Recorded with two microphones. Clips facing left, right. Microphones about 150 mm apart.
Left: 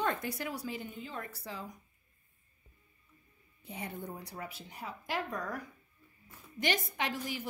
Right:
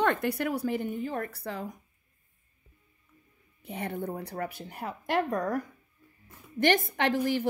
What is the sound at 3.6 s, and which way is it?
A woman's voice, 65° right (ahead or behind).